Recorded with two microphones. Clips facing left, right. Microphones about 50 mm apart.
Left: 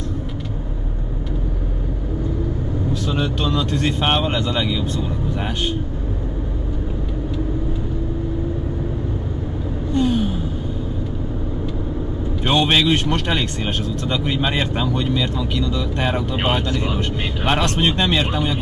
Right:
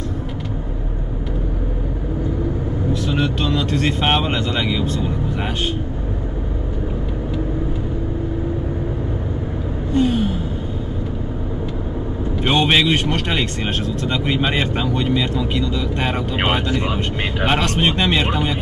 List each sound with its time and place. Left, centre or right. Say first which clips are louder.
3.1 s speech: right 1 dB; centre
9.9 s gasp: right 1 dB; centre
12.4 s speech: right 1 dB; centre